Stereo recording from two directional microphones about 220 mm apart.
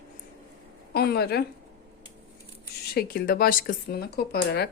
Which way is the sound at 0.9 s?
45° left (ahead or behind).